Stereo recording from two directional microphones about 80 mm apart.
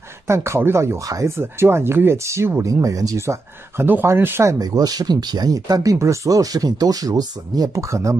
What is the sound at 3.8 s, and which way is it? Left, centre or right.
Speech, right.